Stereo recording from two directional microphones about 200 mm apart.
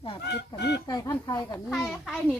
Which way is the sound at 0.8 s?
20° left (ahead or behind).